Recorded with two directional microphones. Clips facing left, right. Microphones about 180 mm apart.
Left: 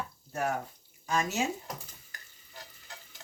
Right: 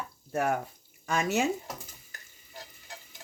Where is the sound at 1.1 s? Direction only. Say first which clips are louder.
Right 3 dB; 60° right (ahead or behind).